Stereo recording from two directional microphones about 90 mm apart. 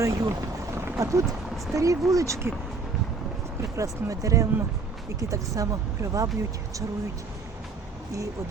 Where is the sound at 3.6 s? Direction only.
35° right (ahead or behind).